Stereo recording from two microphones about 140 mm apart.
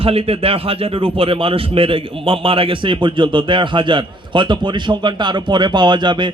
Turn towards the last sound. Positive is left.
turn(degrees=-35)  # may be behind; listen again after turning